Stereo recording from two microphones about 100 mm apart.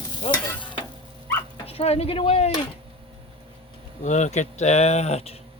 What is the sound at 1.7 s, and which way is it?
Speech, 80° left.